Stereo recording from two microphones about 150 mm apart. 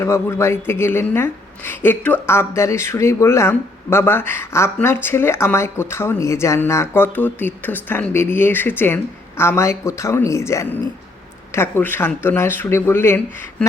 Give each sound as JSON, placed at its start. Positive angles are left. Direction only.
{"t": 0.0, "sound": "a woman's voice", "side_deg": 20}